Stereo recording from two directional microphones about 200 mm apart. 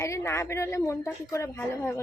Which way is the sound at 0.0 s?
15° left (ahead or behind).